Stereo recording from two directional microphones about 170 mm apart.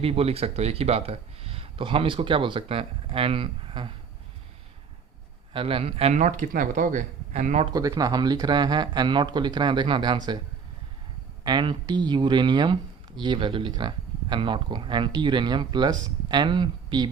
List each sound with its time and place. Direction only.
0.0 s speech: 35° right (ahead or behind)
5.5 s speech: 30° right (ahead or behind)
7.7 s speech: 20° right (ahead or behind)
11.4 s speech: 25° right (ahead or behind)